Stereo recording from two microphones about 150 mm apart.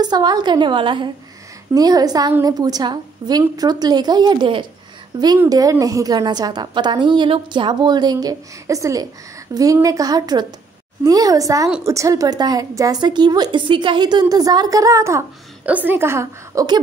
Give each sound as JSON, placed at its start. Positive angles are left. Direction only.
{"t": 0.0, "sound": "a woman's voice", "side_deg": -30}